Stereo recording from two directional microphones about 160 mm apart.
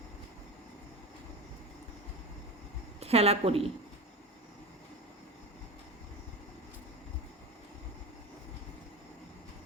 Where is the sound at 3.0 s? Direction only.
40° right (ahead or behind).